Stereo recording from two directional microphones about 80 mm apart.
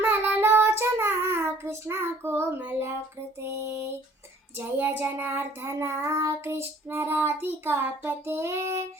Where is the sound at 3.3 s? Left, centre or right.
Right.